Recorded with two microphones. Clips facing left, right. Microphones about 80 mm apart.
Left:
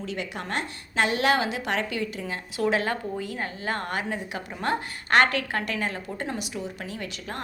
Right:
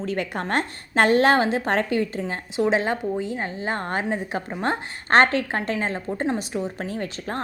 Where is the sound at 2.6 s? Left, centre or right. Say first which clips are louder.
Right 4 dB; right.